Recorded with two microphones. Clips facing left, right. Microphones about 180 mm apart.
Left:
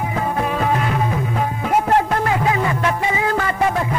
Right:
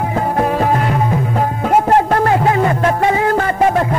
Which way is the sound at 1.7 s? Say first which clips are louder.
Right 4 dB; 50° right (ahead or behind).